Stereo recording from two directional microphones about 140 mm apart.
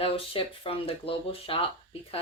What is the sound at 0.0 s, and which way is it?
Speech, 40° left (ahead or behind).